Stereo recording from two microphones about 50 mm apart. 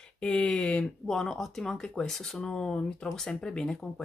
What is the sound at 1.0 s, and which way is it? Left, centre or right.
Speech, centre.